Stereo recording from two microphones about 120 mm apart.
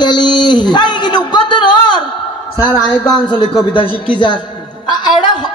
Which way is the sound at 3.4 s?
40° left (ahead or behind).